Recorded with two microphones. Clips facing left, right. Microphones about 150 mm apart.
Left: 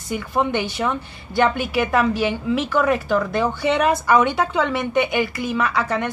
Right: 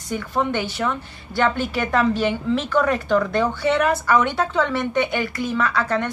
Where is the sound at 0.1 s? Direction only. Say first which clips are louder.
Left 1 dB; 10° left (ahead or behind).